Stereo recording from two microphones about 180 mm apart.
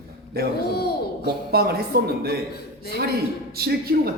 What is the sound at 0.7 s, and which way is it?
Speech, 60° left (ahead or behind).